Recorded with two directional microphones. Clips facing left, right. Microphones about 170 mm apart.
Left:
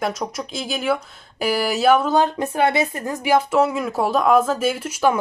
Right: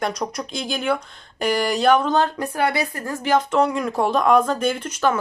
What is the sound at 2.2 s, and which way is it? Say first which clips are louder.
Speech: left 3 dB; 20° left (ahead or behind).